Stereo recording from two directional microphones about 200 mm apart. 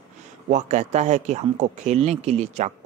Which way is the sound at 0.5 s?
35° right (ahead or behind).